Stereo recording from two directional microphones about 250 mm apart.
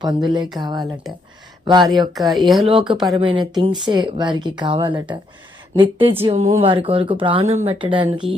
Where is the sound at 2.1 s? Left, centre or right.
Centre.